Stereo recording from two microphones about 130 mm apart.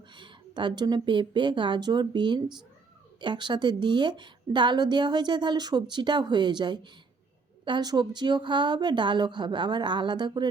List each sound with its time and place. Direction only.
0.1 s a woman's voice: 35° right (ahead or behind)